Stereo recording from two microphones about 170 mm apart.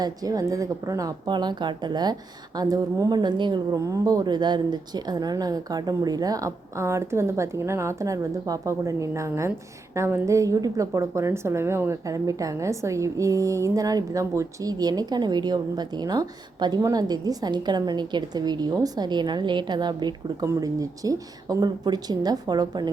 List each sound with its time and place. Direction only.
0.0 s speech: 20° right (ahead or behind)